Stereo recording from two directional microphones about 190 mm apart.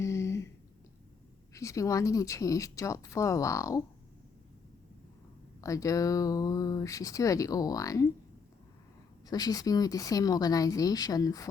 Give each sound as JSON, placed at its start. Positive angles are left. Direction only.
{"t": 0.0, "sound": "a sound", "side_deg": 15}
{"t": 1.5, "sound": "speech", "side_deg": 15}
{"t": 5.5, "sound": "speech", "side_deg": 15}
{"t": 9.2, "sound": "speech", "side_deg": 20}